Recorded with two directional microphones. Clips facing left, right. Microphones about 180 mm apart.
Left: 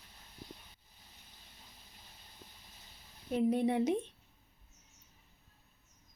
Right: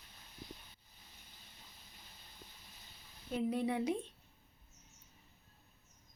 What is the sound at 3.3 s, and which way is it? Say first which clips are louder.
Speech: left 5 dB; 20° left (ahead or behind).